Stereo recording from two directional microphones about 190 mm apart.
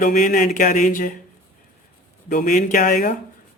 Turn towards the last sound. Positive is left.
turn(degrees=45)  # may be behind; listen again after turning